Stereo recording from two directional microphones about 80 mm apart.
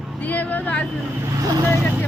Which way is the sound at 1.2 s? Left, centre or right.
Right.